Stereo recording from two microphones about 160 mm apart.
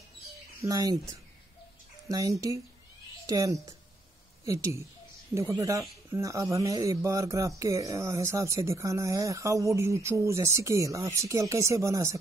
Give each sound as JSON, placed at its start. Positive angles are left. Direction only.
{"t": 0.6, "sound": "speech", "side_deg": -20}